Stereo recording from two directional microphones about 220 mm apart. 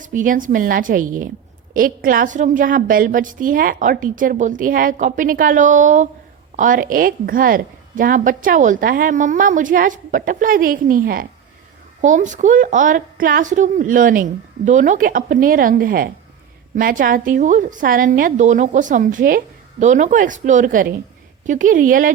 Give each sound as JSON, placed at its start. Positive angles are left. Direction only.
{"t": 0.0, "sound": "a woman's voice", "side_deg": -35}